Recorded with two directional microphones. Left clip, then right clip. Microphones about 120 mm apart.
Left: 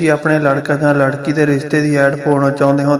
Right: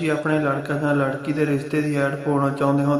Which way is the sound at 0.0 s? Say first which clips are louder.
Left 9 dB; 65° left (ahead or behind).